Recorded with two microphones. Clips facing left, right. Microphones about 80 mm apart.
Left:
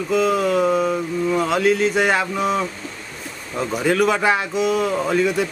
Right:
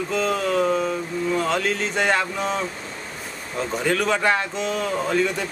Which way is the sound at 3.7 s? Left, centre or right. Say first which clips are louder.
Left 4 dB; centre.